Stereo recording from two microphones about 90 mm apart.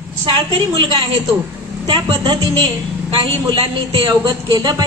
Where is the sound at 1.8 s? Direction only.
60° right (ahead or behind).